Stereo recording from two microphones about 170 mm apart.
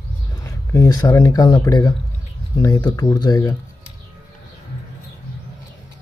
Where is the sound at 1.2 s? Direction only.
25° left (ahead or behind).